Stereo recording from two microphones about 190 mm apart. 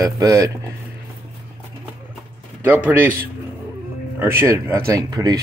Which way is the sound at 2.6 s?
10° right (ahead or behind).